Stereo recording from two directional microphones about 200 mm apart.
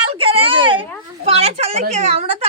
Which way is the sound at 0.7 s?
25° right (ahead or behind).